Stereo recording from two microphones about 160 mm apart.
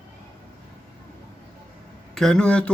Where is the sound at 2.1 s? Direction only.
5° left (ahead or behind).